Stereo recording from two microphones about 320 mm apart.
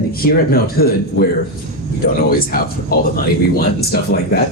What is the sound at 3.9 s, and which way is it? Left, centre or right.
Speech, left.